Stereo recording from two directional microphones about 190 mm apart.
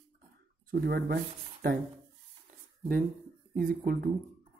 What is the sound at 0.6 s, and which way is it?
Speech, 55° right (ahead or behind).